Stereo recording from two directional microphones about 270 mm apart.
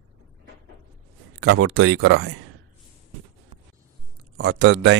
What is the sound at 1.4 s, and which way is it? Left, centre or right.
Speech, right.